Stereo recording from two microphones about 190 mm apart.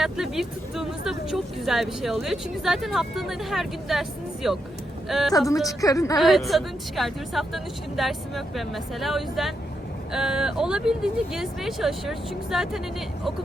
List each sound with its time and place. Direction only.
0.0 s speech: centre (ahead or behind)
5.6 s a woman's voice: 15° left (ahead or behind)
6.1 s speech: centre (ahead or behind)